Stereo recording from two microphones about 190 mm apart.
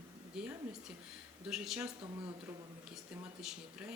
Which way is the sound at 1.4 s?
5° right (ahead or behind).